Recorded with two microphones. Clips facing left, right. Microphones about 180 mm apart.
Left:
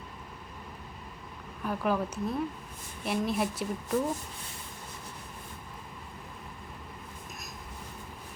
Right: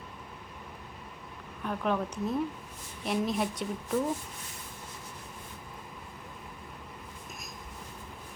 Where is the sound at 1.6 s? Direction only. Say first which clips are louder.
Left 1 dB; 5° left (ahead or behind).